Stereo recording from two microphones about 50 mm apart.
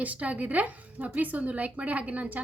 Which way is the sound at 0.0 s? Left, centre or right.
Right.